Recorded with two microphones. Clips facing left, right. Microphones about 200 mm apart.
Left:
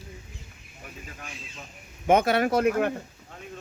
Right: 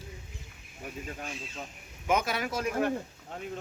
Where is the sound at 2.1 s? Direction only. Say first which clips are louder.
Left 8 dB; 60° left (ahead or behind).